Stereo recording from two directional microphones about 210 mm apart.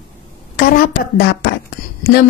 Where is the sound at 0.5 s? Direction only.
45° left (ahead or behind).